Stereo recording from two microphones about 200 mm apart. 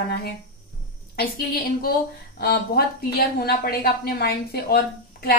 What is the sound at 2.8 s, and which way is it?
A woman's voice, 50° left (ahead or behind).